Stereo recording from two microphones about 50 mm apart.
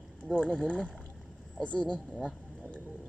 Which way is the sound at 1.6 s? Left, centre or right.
Left.